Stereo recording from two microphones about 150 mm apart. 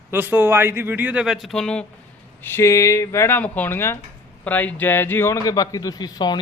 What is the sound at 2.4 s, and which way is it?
A man's voice, 15° left (ahead or behind).